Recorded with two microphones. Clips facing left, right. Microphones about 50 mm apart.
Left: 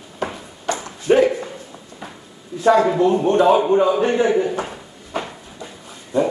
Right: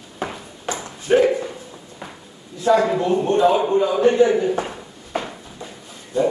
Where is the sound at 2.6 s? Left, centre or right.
Left.